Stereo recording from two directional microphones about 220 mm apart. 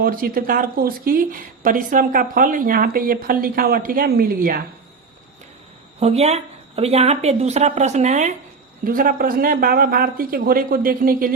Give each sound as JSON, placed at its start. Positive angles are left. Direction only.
{"t": 0.0, "sound": "speech", "side_deg": -40}
{"t": 6.0, "sound": "speech", "side_deg": -30}